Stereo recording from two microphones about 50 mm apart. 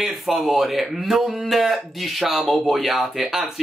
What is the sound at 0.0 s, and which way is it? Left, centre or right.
Speech, centre.